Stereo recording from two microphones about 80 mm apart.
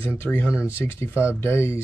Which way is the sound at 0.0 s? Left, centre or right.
Left.